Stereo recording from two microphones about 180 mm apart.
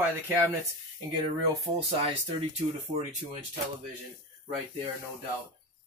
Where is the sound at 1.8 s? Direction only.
35° right (ahead or behind).